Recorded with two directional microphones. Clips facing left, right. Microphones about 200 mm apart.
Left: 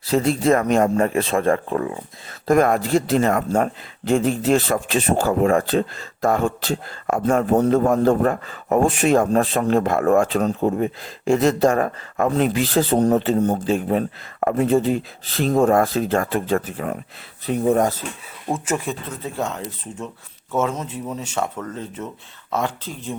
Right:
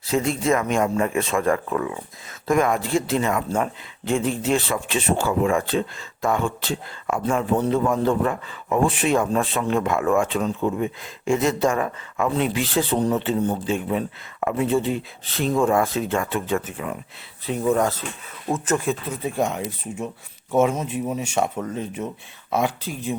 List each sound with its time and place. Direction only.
0.0 s speech: 35° left (ahead or behind)
18.5 s speech: 10° left (ahead or behind)
18.9 s speech: 10° right (ahead or behind)